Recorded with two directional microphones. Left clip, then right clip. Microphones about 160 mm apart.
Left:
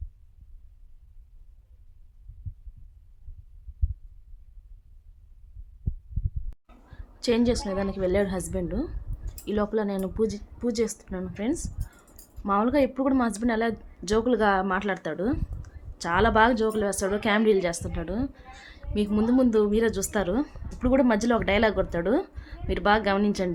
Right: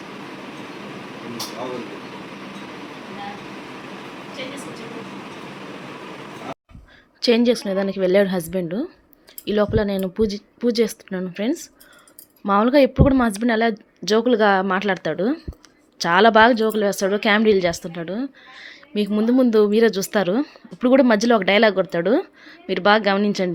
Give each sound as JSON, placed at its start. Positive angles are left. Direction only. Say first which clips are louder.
{"t": 7.2, "sound": "speech", "louder": "right 7 dB", "side_deg": -25}